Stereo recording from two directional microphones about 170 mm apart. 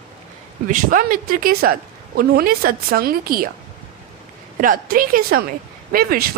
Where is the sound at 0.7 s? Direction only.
55° right (ahead or behind).